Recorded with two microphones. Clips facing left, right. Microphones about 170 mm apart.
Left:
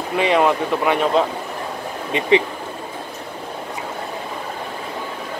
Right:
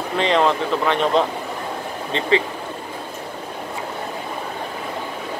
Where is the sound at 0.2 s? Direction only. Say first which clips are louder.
Left 1 dB; 10° left (ahead or behind).